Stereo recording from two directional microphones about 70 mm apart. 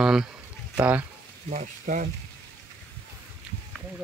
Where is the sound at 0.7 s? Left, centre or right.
Right.